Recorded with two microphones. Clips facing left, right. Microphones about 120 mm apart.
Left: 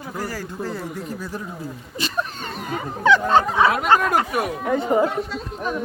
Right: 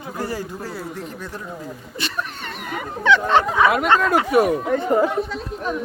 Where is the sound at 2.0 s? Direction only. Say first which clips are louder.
Left 2 dB; 35° left (ahead or behind).